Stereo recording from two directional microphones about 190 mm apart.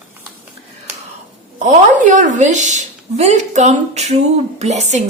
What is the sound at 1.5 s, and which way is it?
A woman's voice, 40° right (ahead or behind).